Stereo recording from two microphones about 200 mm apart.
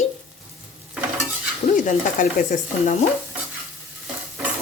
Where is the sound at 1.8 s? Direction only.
40° left (ahead or behind).